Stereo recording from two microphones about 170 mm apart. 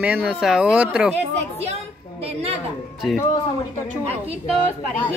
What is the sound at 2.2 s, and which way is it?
Speech, 35° right (ahead or behind).